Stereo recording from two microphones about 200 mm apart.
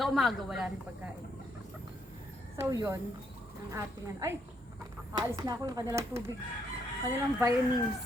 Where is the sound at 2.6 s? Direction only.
15° right (ahead or behind).